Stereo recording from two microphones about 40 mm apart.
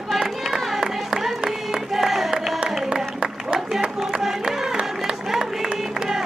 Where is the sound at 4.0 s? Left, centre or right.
Centre.